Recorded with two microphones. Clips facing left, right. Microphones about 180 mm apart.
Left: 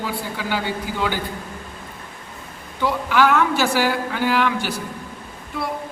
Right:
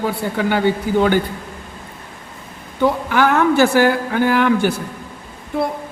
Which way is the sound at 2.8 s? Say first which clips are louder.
Right 3 dB; 50° right (ahead or behind).